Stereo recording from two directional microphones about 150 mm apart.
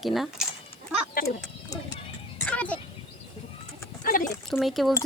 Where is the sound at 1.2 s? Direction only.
75° left (ahead or behind).